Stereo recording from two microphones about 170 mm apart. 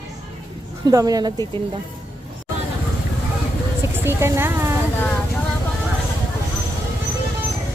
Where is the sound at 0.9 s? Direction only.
20° right (ahead or behind).